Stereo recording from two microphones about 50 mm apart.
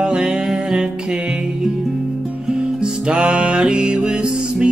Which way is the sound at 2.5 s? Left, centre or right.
Centre.